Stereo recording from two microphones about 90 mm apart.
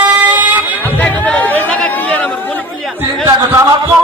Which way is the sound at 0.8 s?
20° left (ahead or behind).